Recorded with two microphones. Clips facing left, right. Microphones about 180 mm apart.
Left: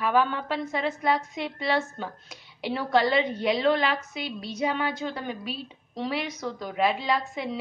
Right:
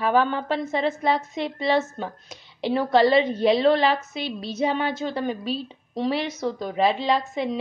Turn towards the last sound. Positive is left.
turn(degrees=-20)  # may be behind; listen again after turning